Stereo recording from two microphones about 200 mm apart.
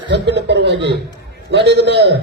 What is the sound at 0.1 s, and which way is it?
A man's voice, 60° right (ahead or behind).